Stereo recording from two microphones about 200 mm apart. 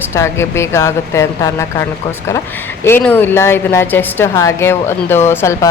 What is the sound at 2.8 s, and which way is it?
A woman's voice, 10° left (ahead or behind).